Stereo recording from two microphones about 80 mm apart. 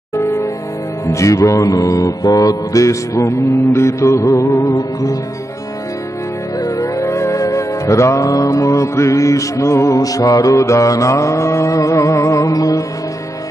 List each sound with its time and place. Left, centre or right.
0.1 s music: left
1.0 s mantra: left
6.6 s music: left